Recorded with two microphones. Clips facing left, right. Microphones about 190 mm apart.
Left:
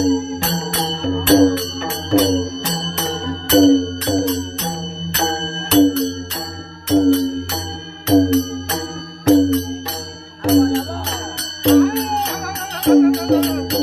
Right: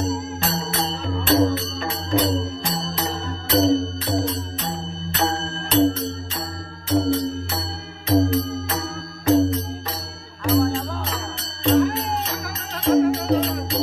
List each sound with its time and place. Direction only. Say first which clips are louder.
0.5 s music: left 3 dB; 80° left